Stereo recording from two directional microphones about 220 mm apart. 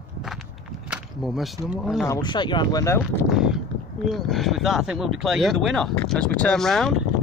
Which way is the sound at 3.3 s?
5° right (ahead or behind).